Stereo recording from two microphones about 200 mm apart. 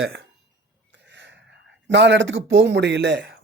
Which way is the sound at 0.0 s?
55° right (ahead or behind).